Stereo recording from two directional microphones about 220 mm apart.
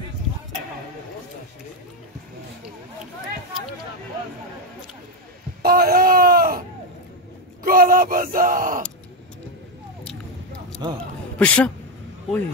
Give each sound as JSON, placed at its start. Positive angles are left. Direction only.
{"t": 5.6, "sound": "a sound", "side_deg": -45}
{"t": 7.6, "sound": "yell", "side_deg": -40}
{"t": 10.8, "sound": "a man's voice", "side_deg": -20}
{"t": 11.3, "sound": "speech", "side_deg": 5}